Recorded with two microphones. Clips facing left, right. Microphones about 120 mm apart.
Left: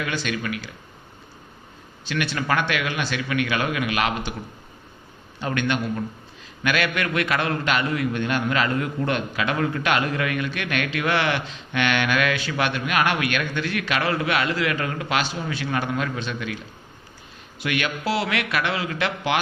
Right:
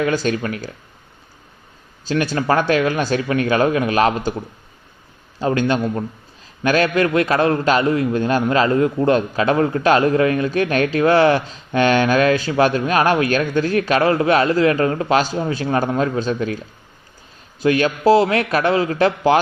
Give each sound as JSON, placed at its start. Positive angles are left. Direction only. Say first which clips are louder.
{"t": 0.0, "sound": "a man's voice", "louder": "right 8 dB", "side_deg": -40}
{"t": 2.0, "sound": "a man's voice", "louder": "right 6 dB", "side_deg": -35}